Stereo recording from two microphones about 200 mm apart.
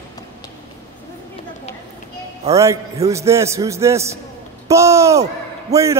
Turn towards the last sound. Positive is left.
turn(degrees=-15)  # may be behind; listen again after turning